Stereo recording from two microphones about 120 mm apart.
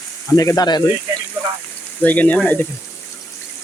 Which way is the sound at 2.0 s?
15° left (ahead or behind).